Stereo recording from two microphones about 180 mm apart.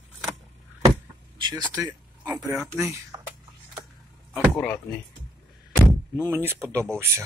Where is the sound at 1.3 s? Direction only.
20° right (ahead or behind).